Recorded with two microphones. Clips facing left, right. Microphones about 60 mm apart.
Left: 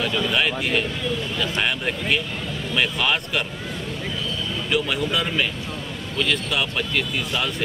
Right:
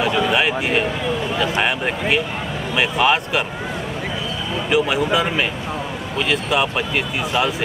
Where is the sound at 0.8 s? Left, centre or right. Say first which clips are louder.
Right 5 dB; right.